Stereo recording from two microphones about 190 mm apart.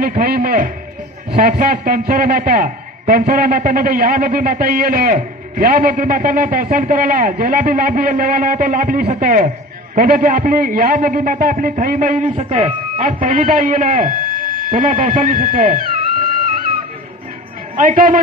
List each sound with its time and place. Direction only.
0.2 s a man's voice: 50° right (ahead or behind); by 13.0 s 30° right (ahead or behind)
13.0 s a man's voice: 45° right (ahead or behind)
17.7 s a man's voice: 45° right (ahead or behind)